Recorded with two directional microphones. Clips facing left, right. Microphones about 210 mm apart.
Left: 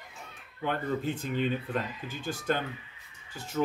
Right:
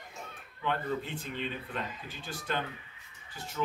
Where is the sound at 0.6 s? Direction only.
45° left (ahead or behind).